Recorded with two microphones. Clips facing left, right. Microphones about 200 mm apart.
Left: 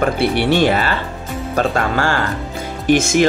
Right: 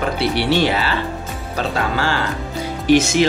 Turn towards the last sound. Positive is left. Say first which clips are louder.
# left 1 dB
turn(degrees=50)  # may be behind; listen again after turning